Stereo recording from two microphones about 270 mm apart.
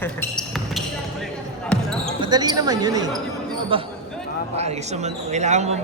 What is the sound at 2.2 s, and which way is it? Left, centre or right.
Speech, centre.